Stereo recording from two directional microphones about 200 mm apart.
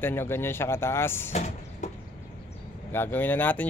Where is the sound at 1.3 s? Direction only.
35° left (ahead or behind).